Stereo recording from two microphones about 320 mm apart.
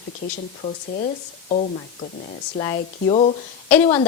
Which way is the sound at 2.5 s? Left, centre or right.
Centre.